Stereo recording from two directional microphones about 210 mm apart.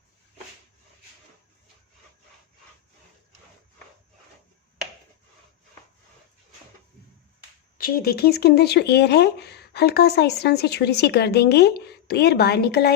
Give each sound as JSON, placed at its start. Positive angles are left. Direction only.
{"t": 7.8, "sound": "speech", "side_deg": 45}